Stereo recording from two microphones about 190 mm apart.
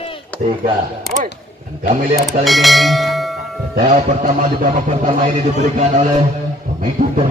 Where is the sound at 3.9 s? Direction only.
40° right (ahead or behind).